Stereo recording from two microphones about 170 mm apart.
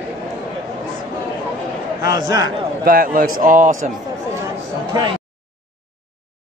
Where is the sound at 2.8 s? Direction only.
55° right (ahead or behind).